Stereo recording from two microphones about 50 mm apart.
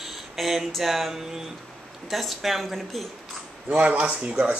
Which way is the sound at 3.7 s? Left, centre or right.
Right.